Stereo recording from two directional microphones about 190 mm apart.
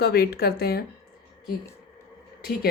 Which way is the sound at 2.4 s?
55° left (ahead or behind).